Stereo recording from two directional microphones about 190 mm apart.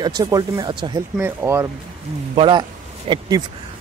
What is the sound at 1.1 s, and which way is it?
Speech, 10° right (ahead or behind).